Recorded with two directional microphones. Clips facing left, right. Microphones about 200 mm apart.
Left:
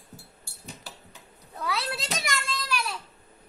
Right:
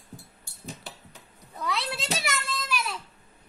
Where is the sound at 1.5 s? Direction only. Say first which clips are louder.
Even; centre (ahead or behind).